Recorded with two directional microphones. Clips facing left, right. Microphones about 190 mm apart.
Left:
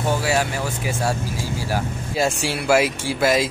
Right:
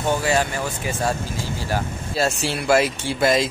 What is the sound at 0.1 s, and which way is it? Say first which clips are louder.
Speech: right 1 dB; 5° left (ahead or behind).